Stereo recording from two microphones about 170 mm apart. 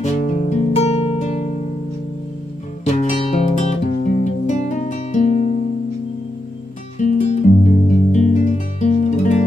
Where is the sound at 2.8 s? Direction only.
45° left (ahead or behind).